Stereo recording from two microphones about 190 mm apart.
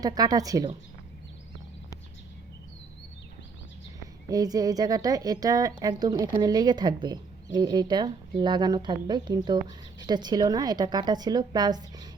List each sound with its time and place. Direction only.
0.0 s speech: 20° right (ahead or behind)
4.3 s speech: 20° right (ahead or behind)